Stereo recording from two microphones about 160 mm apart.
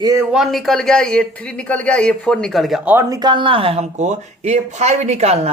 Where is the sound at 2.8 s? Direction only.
15° right (ahead or behind).